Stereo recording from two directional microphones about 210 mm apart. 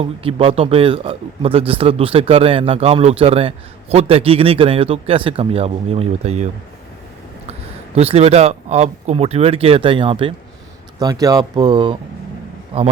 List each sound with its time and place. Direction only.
0.0 s speech: 25° right (ahead or behind)
7.9 s speech: 30° right (ahead or behind)